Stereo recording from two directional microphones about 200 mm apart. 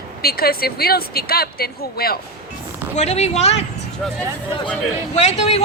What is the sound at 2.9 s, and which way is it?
Speech, 35° left (ahead or behind).